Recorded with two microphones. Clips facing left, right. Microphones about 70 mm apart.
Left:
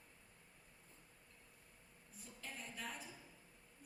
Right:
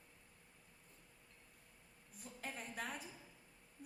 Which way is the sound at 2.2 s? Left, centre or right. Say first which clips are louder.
Right 4 dB; right.